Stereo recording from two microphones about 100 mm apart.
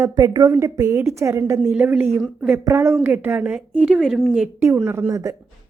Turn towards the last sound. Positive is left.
turn(degrees=-35)  # may be behind; listen again after turning